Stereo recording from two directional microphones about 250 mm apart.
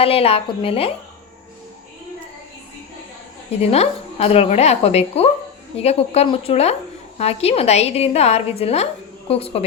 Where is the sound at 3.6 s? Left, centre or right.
Left.